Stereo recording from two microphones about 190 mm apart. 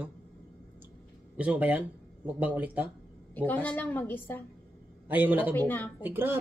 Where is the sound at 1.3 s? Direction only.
10° right (ahead or behind).